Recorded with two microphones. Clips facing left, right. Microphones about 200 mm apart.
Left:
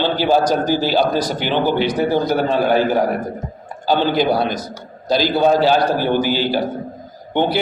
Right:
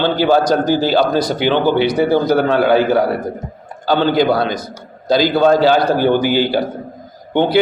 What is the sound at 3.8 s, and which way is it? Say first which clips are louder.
A man's voice: right 3 dB; 60° right (ahead or behind).